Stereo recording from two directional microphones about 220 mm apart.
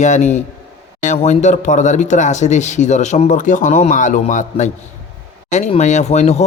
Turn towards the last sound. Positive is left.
turn(degrees=30)  # may be behind; listen again after turning